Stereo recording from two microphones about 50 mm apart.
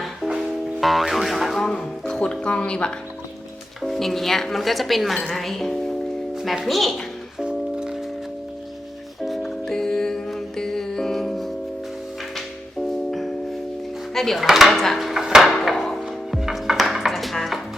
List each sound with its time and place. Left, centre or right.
0.0 s music: centre
2.2 s speech: centre
3.8 s speech: centre
7.3 s music: centre
9.2 s music: centre
13.1 s music: centre
14.1 s speech: centre
14.9 s wood: centre
15.8 s music: centre